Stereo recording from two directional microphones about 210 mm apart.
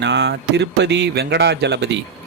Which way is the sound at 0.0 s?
55° right (ahead or behind).